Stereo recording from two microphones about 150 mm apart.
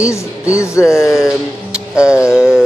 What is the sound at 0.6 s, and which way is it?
Speech, 20° left (ahead or behind).